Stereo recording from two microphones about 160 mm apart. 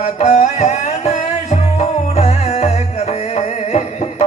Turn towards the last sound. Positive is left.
turn(degrees=45)  # may be behind; listen again after turning